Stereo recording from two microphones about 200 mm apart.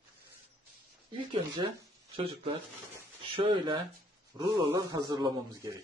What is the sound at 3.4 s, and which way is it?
A man's voice, 25° right (ahead or behind).